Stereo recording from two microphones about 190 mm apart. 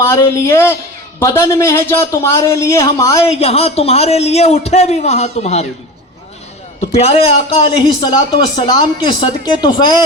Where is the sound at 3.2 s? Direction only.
30° left (ahead or behind).